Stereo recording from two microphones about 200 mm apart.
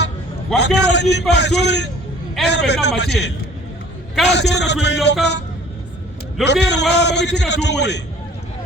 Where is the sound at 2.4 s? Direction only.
55° left (ahead or behind).